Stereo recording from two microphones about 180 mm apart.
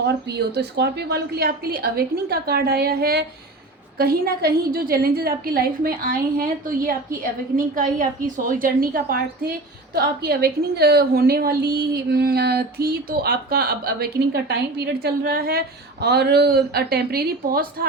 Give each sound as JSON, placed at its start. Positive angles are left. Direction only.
{"t": 0.0, "sound": "a woman's voice", "side_deg": -70}